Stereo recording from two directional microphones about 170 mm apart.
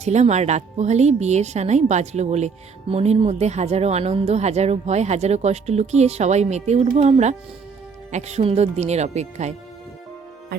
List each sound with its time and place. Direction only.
0.0 s speech: 40° right (ahead or behind)